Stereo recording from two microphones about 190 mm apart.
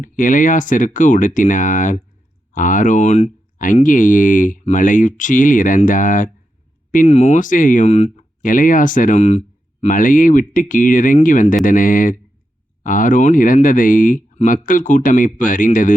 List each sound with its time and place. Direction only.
0.0 s speech: 45° left (ahead or behind)